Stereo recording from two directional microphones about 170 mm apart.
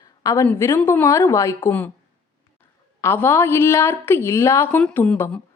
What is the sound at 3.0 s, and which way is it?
A woman's voice, 15° left (ahead or behind).